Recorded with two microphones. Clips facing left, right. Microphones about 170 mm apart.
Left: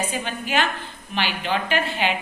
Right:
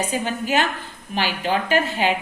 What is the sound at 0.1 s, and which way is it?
A woman's voice, 40° right (ahead or behind).